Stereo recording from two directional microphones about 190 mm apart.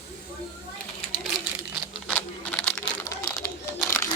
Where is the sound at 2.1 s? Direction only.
5° left (ahead or behind).